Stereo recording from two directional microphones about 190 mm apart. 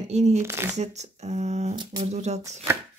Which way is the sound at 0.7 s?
35° right (ahead or behind).